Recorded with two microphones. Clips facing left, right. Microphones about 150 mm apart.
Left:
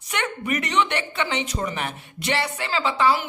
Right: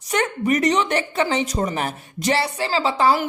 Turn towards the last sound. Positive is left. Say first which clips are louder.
# right 3 dB
turn(degrees=-40)  # may be behind; listen again after turning